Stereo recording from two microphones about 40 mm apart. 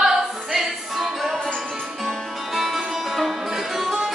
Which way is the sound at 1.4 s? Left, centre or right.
Centre.